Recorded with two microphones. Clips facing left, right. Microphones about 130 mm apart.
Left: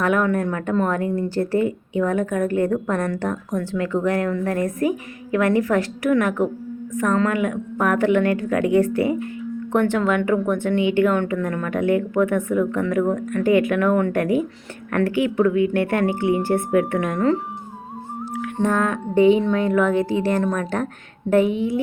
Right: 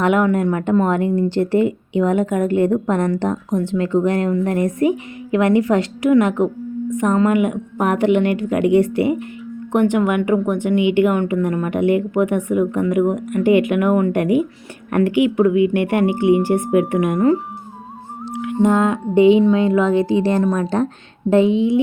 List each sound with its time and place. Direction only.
0.0 s a woman's voice: 20° right (ahead or behind)
18.4 s a woman's voice: 15° right (ahead or behind)